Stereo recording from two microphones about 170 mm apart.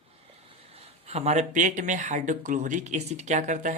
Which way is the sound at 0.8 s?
40° right (ahead or behind).